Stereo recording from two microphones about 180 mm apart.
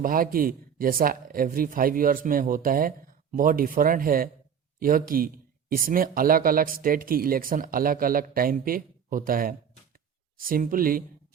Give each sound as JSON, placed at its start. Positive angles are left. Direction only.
{"t": 0.0, "sound": "speech", "side_deg": -50}